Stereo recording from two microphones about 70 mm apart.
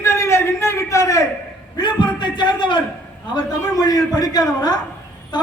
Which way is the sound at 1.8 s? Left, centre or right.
Left.